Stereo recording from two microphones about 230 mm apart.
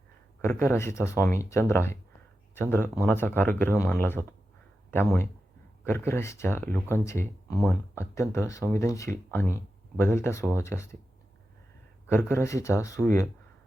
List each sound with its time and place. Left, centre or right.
0.4 s speech: centre
12.0 s speech: centre